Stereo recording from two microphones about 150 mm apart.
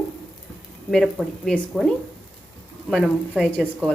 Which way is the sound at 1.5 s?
Centre (ahead or behind).